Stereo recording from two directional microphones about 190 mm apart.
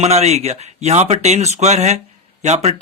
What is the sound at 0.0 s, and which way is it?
Speech, 35° right (ahead or behind).